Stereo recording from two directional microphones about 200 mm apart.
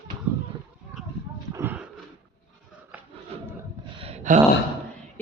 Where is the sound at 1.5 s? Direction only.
10° right (ahead or behind).